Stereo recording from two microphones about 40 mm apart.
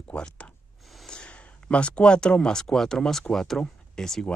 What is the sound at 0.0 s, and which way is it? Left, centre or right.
Speech, left.